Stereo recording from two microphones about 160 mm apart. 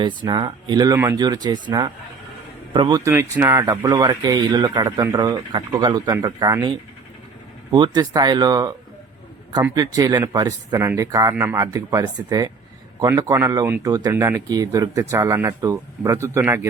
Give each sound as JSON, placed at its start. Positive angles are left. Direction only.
{"t": 0.0, "sound": "speech", "side_deg": -30}
{"t": 3.0, "sound": "speech", "side_deg": -15}
{"t": 9.7, "sound": "speech", "side_deg": -25}